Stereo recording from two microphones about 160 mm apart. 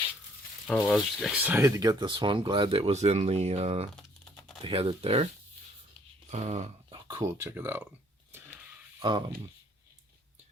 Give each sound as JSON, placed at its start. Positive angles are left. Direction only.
{"t": 0.9, "sound": "speech", "side_deg": 0}
{"t": 6.3, "sound": "speech", "side_deg": -45}
{"t": 6.9, "sound": "a sound", "side_deg": -25}
{"t": 9.0, "sound": "speech", "side_deg": -30}